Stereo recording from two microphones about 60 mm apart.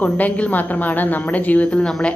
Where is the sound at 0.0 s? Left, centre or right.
Left.